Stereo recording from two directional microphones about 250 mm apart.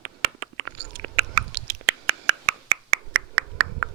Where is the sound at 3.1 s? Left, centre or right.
Right.